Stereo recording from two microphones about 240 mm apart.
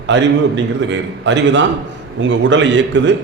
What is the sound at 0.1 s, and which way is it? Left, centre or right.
A man's voice, right.